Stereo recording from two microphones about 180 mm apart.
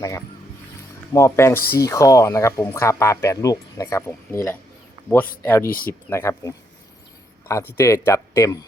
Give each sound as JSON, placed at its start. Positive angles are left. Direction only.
{"t": 0.0, "sound": "speech", "side_deg": 15}
{"t": 5.6, "sound": "speech", "side_deg": 55}
{"t": 6.1, "sound": "speech", "side_deg": 15}
{"t": 7.8, "sound": "speech", "side_deg": 15}